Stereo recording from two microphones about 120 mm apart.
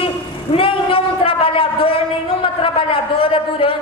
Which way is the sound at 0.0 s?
50° left (ahead or behind).